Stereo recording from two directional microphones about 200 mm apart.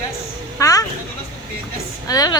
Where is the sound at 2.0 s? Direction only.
20° left (ahead or behind).